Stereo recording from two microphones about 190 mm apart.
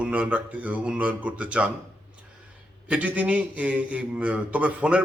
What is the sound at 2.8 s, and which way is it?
A man's voice, 5° right (ahead or behind).